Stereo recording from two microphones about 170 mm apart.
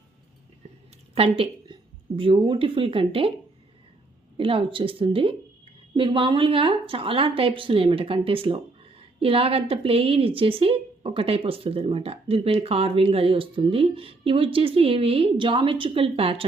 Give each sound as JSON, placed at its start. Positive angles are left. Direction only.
{"t": 1.1, "sound": "a woman's voice", "side_deg": -35}
{"t": 4.4, "sound": "a woman's voice", "side_deg": -30}